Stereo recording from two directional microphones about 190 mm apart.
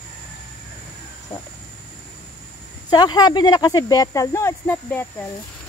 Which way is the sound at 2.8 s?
20° left (ahead or behind).